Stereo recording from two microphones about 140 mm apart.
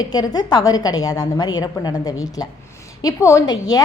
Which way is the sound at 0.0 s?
30° left (ahead or behind).